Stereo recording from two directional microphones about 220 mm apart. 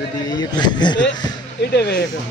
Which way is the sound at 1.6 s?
50° left (ahead or behind).